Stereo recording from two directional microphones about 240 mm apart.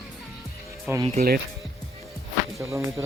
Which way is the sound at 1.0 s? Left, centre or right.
Right.